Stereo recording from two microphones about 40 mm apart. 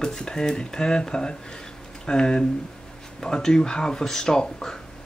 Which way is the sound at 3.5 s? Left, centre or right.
Centre.